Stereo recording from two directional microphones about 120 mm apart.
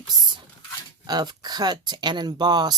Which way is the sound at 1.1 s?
35° right (ahead or behind).